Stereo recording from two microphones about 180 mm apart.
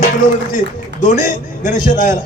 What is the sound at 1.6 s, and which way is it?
Speech, 45° left (ahead or behind).